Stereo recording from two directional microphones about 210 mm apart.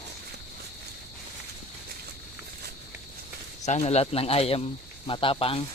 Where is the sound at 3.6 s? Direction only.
30° left (ahead or behind).